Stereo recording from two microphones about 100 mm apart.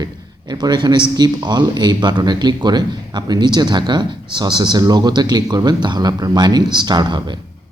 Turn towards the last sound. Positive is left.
turn(degrees=-45)  # may be behind; listen again after turning